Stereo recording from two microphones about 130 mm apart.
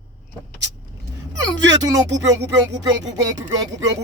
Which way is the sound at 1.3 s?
30° right (ahead or behind).